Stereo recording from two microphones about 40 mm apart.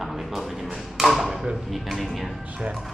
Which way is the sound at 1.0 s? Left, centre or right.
Centre.